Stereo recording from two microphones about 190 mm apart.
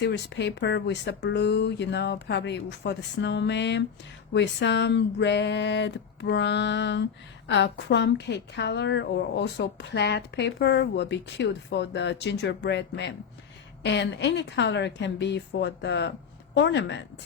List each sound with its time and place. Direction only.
0.0 s a woman's voice: 65° left (ahead or behind)